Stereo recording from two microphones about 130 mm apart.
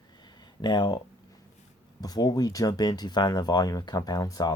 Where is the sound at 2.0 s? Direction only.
30° left (ahead or behind).